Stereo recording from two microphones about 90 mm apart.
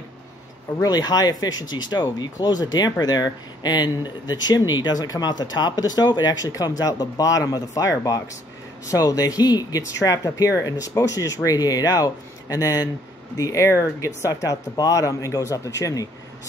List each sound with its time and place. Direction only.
0.8 s speech: 50° left (ahead or behind)